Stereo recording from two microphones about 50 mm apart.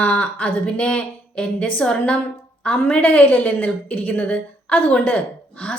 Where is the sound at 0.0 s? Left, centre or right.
Left.